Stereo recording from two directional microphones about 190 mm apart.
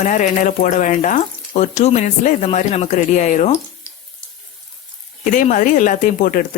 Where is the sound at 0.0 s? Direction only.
40° left (ahead or behind).